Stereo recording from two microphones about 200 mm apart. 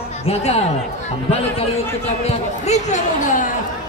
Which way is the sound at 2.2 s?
35° left (ahead or behind).